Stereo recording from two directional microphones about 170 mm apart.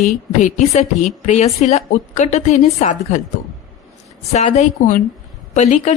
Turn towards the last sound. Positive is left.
turn(degrees=40)  # may be behind; listen again after turning